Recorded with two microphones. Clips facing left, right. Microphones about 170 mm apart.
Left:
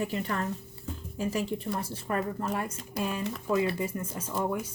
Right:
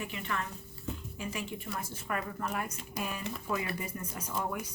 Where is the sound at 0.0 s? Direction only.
40° left (ahead or behind).